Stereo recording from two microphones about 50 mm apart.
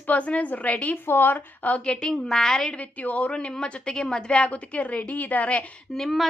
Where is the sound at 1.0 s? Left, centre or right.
Left.